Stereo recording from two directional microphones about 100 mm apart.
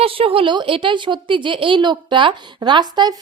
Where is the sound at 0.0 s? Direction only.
70° right (ahead or behind).